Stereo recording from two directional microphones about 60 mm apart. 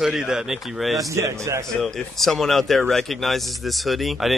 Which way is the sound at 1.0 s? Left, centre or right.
Right.